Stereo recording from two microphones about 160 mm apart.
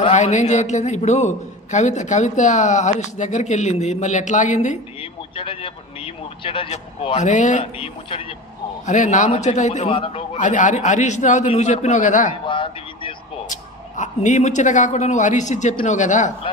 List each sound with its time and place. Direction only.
0.1 s a man's voice: 50° left (ahead or behind)
5.3 s a man's voice: 35° left (ahead or behind)
9.8 s speech: 35° left (ahead or behind)
10.3 s a man's voice: 50° left (ahead or behind)
12.4 s speech: 30° left (ahead or behind)
13.5 s a man's voice: 50° left (ahead or behind)